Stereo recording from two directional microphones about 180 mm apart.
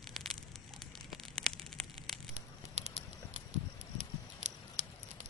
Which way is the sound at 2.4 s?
40° right (ahead or behind).